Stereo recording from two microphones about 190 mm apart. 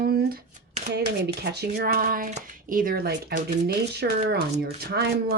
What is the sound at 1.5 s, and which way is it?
Speech, 60° right (ahead or behind).